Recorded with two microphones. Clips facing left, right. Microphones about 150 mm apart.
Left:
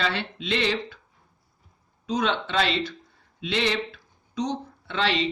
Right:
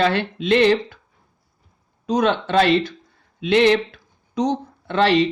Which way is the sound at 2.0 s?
45° right (ahead or behind).